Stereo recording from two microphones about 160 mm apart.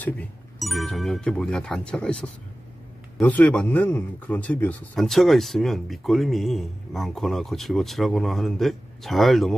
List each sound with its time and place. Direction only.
0.0 s speech: 5° left (ahead or behind)